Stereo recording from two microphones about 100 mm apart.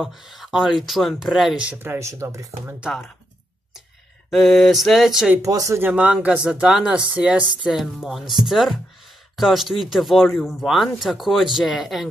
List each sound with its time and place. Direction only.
0.0 s speech: 5° right (ahead or behind)
1.7 s speech: 25° right (ahead or behind)
4.3 s speech: centre (ahead or behind)
5.4 s speech: 35° right (ahead or behind)
5.8 s speech: 15° right (ahead or behind)